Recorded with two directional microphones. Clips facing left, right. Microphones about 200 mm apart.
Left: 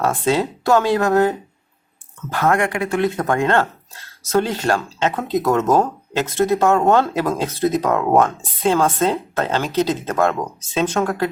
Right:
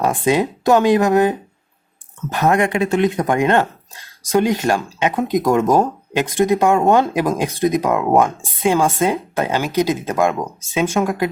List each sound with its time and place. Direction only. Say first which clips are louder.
0.0 s speech: right 2 dB; 15° right (ahead or behind)